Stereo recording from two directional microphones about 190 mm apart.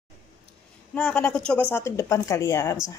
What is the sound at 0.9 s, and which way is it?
A woman's voice, 5° left (ahead or behind).